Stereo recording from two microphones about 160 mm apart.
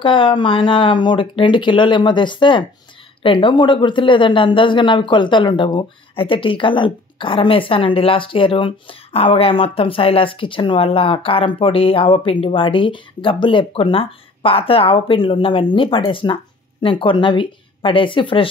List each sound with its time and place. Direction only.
0.0 s speech: 30° left (ahead or behind)